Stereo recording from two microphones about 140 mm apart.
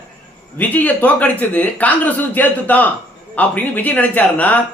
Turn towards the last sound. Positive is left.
turn(degrees=10)  # may be behind; listen again after turning